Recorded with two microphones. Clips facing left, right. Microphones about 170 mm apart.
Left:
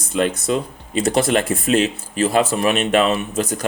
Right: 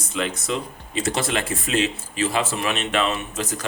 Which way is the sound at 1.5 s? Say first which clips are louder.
Left 6 dB; 40° left (ahead or behind).